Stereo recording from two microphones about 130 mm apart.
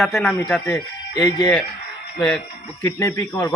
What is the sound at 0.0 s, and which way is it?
Speech, centre (ahead or behind).